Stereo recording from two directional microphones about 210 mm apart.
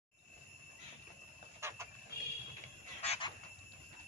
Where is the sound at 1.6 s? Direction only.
10° right (ahead or behind).